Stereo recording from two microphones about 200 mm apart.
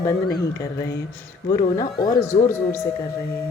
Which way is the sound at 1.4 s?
20° left (ahead or behind).